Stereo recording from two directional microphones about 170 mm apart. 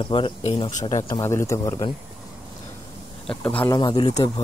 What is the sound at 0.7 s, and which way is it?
Speech, 45° left (ahead or behind).